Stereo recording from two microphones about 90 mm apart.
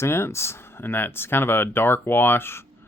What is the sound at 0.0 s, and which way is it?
Speech, 30° left (ahead or behind).